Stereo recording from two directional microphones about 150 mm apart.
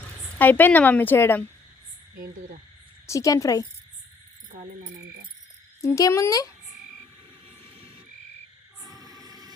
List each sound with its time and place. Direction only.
0.3 s a woman's voice: 10° left (ahead or behind)
2.1 s speech: 65° right (ahead or behind)
3.1 s speech: 20° left (ahead or behind)
4.5 s frog: 55° right (ahead or behind)
5.8 s speech: 20° left (ahead or behind)
8.8 s a sound: centre (ahead or behind)
9.1 s train: 25° right (ahead or behind)